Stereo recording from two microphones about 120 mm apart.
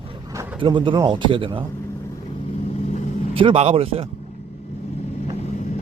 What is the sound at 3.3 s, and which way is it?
Speech, 50° right (ahead or behind).